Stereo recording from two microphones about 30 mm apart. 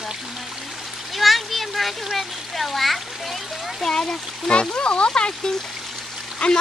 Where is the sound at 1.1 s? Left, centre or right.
Centre.